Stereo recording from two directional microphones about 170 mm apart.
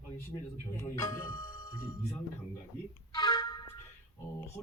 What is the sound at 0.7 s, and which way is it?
Speech, 15° left (ahead or behind).